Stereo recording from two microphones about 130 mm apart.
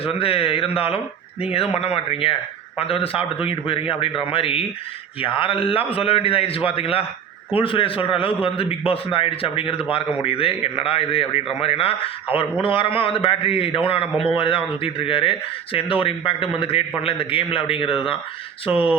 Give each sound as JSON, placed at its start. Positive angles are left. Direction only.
{"t": 0.0, "sound": "a man's voice", "side_deg": 45}